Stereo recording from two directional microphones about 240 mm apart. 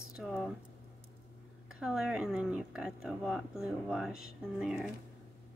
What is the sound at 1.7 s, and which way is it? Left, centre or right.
Speech, centre.